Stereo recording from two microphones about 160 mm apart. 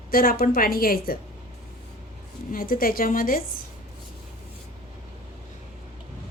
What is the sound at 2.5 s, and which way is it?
Speech, 60° left (ahead or behind).